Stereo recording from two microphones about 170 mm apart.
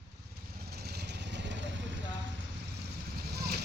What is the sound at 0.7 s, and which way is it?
Vehicle, 75° right (ahead or behind).